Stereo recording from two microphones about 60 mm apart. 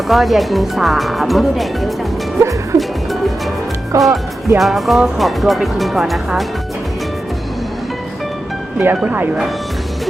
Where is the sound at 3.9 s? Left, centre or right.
Right.